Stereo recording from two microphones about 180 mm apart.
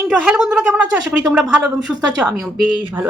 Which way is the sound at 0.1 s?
Centre (ahead or behind).